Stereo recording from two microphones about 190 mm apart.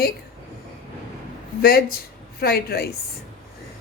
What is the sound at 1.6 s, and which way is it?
A woman's voice, 50° left (ahead or behind).